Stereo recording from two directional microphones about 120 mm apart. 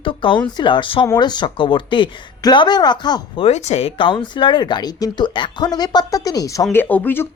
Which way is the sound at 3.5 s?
70° left (ahead or behind).